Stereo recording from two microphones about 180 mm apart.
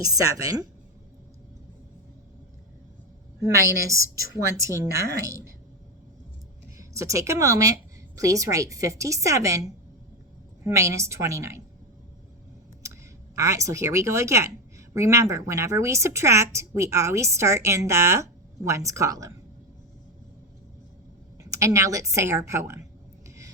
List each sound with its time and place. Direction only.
0.0 s a woman's voice: 20° right (ahead or behind)
3.5 s a woman's voice: 15° right (ahead or behind)
6.7 s a woman's voice: 15° right (ahead or behind)
13.3 s a woman's voice: 15° right (ahead or behind)
21.4 s a woman's voice: 15° right (ahead or behind)